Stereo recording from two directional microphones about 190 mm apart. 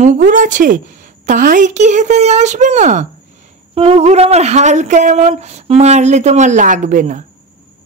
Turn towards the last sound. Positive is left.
turn(degrees=-40)  # may be behind; listen again after turning